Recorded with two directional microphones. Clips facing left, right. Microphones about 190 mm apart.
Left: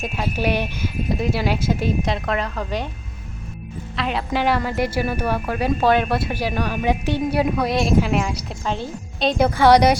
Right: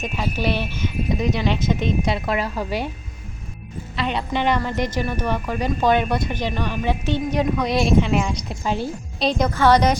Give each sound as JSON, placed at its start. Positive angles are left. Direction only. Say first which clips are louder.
{"t": 0.0, "sound": "a woman's voice", "louder": "left 1 dB", "side_deg": 5}
{"t": 0.9, "sound": "speech", "louder": "even", "side_deg": 0}
{"t": 3.9, "sound": "a woman's voice", "louder": "even", "side_deg": 0}
{"t": 9.6, "sound": "a woman's voice", "louder": "left 3 dB", "side_deg": 15}